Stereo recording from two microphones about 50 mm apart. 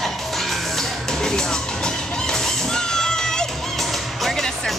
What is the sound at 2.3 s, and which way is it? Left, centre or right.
Music, centre.